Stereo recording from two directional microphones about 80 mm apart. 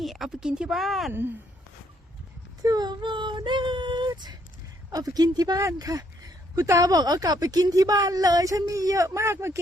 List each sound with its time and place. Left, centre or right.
0.0 s speech: centre
2.6 s child singing: right
4.9 s a woman's voice: right